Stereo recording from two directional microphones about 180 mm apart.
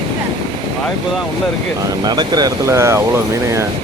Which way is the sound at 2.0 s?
20° right (ahead or behind).